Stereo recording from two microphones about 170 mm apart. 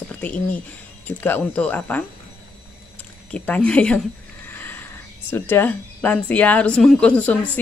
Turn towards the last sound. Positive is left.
turn(degrees=10)  # may be behind; listen again after turning